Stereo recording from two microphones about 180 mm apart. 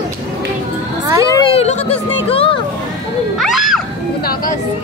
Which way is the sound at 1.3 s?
25° left (ahead or behind).